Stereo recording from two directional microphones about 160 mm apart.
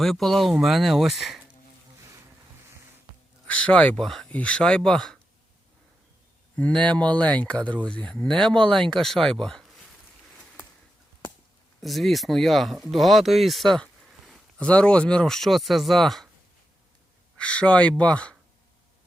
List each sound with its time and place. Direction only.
0.0 s speech: centre (ahead or behind)
2.0 s bee: 20° right (ahead or behind)
3.4 s speech: 10° left (ahead or behind)
6.6 s speech: 10° left (ahead or behind)
11.8 s speech: centre (ahead or behind)
17.3 s speech: 5° left (ahead or behind)